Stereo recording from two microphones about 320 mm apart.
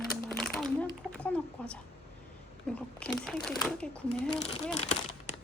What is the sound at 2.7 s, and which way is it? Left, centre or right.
Shuffling cards, centre.